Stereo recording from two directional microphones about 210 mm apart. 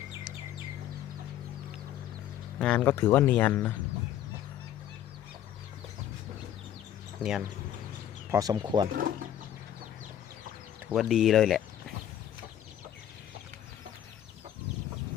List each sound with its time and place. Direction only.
2.6 s speech: 5° left (ahead or behind)
7.2 s speech: 5° right (ahead or behind)
8.3 s speech: 15° right (ahead or behind)
10.9 s speech: centre (ahead or behind)